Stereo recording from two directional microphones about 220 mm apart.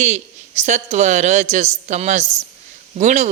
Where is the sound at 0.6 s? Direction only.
30° right (ahead or behind).